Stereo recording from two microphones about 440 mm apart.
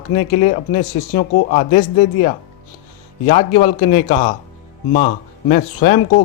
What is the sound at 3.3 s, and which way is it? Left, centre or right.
Speech, centre.